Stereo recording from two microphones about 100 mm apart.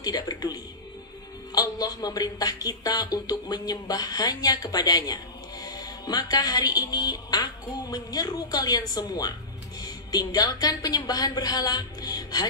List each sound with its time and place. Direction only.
0.0 s speech: 40° left (ahead or behind)
1.5 s music: 45° left (ahead or behind)